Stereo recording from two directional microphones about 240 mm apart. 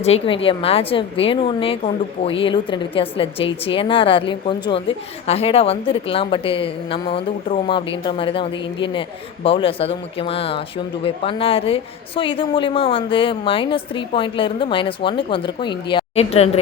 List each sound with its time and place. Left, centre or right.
0.0 s a woman's voice: left